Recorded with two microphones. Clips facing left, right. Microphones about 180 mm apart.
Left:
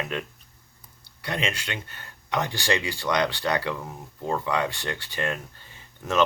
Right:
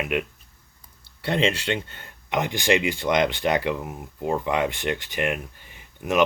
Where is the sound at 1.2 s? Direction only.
30° right (ahead or behind).